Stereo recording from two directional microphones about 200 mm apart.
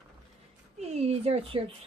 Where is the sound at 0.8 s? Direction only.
30° right (ahead or behind).